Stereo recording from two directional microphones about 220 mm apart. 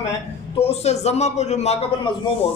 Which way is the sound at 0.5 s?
30° left (ahead or behind).